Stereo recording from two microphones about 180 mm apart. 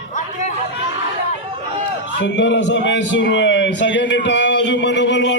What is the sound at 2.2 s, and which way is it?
A man's voice, 85° left.